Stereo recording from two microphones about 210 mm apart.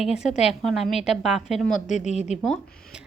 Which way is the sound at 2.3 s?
Centre (ahead or behind).